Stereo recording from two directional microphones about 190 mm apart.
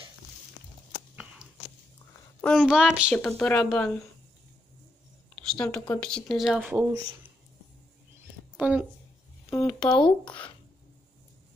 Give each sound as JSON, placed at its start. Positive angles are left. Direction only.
{"t": 1.1, "sound": "biting", "side_deg": -5}
{"t": 2.4, "sound": "a woman's voice", "side_deg": 5}
{"t": 5.4, "sound": "speech", "side_deg": 5}
{"t": 8.5, "sound": "speech", "side_deg": -5}
{"t": 9.5, "sound": "a sound", "side_deg": 15}
{"t": 9.9, "sound": "speech", "side_deg": 25}